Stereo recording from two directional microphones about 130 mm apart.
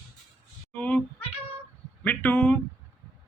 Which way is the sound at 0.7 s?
10° left (ahead or behind).